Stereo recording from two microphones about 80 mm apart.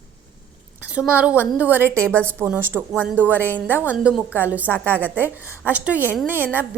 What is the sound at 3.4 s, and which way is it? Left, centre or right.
Speech, centre.